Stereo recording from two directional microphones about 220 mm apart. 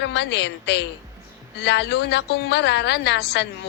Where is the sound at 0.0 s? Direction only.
50° left (ahead or behind).